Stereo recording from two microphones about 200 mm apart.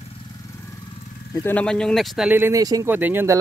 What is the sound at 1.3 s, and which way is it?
Speech, 10° left (ahead or behind).